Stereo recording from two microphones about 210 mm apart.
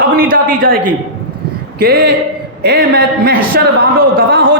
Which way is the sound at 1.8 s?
50° right (ahead or behind).